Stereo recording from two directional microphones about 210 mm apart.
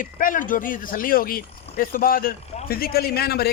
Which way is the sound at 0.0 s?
40° left (ahead or behind).